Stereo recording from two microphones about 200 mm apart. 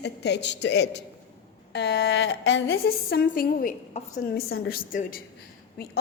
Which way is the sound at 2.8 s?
50° left (ahead or behind).